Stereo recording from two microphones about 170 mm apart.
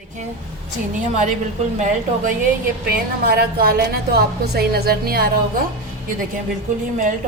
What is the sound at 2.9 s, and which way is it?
A woman's voice, 65° right (ahead or behind).